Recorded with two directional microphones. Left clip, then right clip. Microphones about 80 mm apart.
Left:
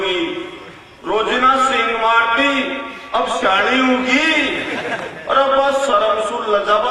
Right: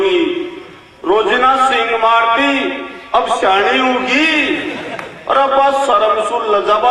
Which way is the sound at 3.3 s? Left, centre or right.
Left.